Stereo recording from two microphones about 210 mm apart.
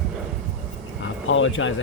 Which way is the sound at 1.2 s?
65° left (ahead or behind).